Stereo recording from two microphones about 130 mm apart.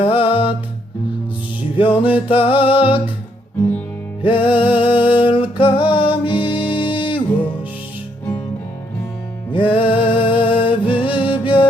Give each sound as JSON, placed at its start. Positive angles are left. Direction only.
{"t": 0.0, "sound": "music", "side_deg": 45}
{"t": 1.7, "sound": "music", "side_deg": 40}
{"t": 4.2, "sound": "music", "side_deg": 40}
{"t": 9.5, "sound": "music", "side_deg": 40}